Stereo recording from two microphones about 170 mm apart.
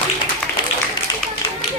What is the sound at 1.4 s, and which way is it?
Run, 25° left (ahead or behind).